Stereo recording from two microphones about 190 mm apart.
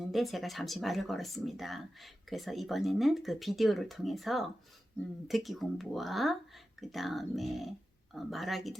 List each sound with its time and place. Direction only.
0.1 s speech: centre (ahead or behind)